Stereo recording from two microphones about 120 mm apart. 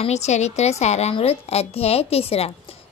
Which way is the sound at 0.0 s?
65° left (ahead or behind).